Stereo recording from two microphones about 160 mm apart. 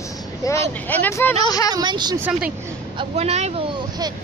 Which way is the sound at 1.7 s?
25° right (ahead or behind).